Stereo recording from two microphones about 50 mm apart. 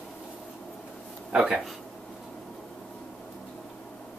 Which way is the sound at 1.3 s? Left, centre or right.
Centre.